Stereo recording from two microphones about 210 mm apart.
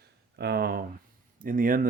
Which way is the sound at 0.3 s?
50° right (ahead or behind).